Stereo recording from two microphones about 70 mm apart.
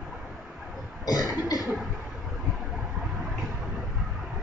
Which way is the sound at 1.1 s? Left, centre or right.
Left.